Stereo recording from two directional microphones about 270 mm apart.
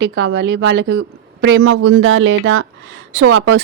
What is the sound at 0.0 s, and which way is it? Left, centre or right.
Speech, right.